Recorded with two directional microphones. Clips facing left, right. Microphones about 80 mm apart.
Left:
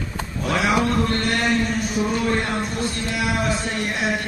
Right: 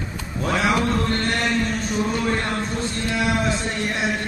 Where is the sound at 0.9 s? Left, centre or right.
Centre.